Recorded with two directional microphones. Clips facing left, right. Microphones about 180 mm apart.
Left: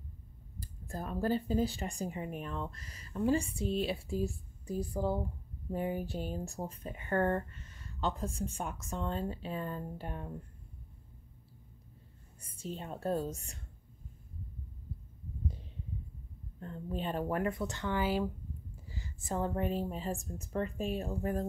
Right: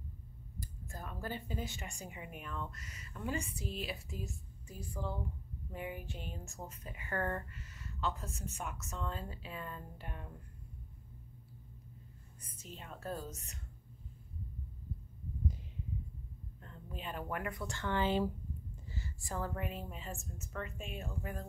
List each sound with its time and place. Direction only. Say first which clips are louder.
0.6 s speech: left 6 dB; 35° left (ahead or behind)
12.4 s speech: left 10 dB; 30° left (ahead or behind)
16.5 s speech: left 11 dB; 35° left (ahead or behind)